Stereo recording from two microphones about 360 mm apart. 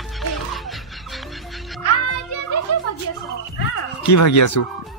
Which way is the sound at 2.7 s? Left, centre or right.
Left.